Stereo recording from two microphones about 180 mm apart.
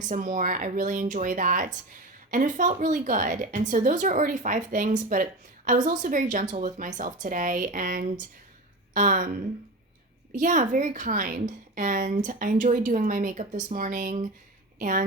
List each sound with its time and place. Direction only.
0.1 s a woman's voice: 45° right (ahead or behind)
10.3 s a woman's voice: 45° right (ahead or behind)